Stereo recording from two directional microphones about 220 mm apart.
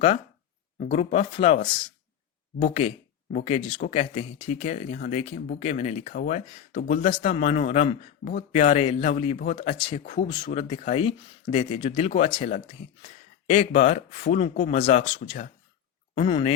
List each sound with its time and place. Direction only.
0.9 s speech: 30° left (ahead or behind)
9.7 s speech: 20° left (ahead or behind)
10.0 s speech: 35° left (ahead or behind)